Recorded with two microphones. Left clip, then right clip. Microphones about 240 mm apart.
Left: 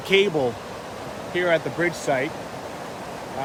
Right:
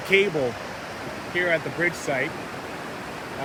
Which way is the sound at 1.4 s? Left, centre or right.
Centre.